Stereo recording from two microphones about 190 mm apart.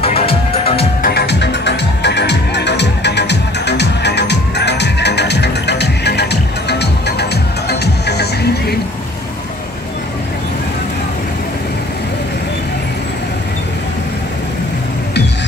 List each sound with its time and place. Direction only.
0.0 s music: 30° left (ahead or behind)
1.0 s music: 60° left (ahead or behind)